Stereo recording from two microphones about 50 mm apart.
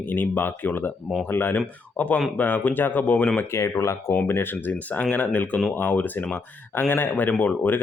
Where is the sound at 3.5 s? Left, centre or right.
Left.